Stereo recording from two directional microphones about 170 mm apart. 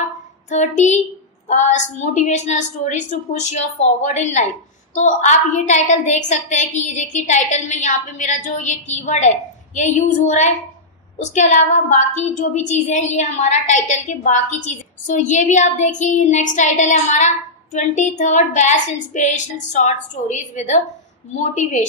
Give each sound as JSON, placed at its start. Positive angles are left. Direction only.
{"t": 0.5, "sound": "a woman's voice", "side_deg": 45}